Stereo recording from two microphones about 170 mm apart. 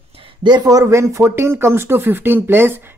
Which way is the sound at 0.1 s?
30° right (ahead or behind).